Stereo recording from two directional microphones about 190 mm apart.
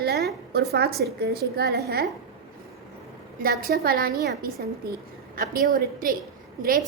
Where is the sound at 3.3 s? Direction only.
50° right (ahead or behind).